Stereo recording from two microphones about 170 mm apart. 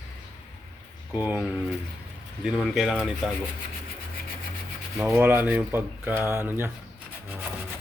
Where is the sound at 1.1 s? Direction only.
10° right (ahead or behind).